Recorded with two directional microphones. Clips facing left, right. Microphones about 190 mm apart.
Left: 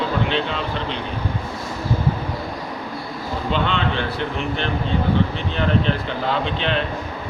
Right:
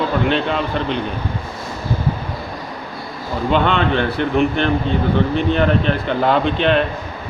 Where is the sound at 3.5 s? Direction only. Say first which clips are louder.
Right 6 dB; 55° right (ahead or behind).